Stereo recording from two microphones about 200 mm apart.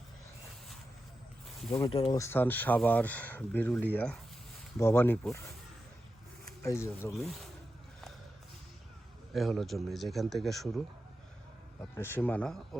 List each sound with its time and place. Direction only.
1.9 s speech: 30° left (ahead or behind)
2.1 s speech: 10° left (ahead or behind)
6.6 s speech: 15° left (ahead or behind)
7.2 s speech: centre (ahead or behind)
9.3 s speech: centre (ahead or behind)
11.8 s speech: 10° left (ahead or behind)